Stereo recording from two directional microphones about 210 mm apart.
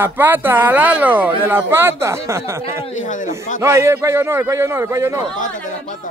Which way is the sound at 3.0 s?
35° left (ahead or behind).